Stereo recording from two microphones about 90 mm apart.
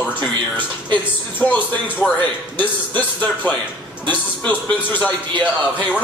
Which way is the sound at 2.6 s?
20° left (ahead or behind).